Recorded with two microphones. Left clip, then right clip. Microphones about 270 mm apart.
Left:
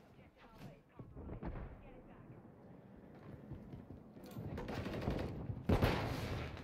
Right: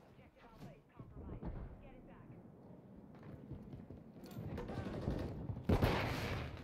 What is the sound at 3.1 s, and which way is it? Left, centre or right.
Clip-clop, centre.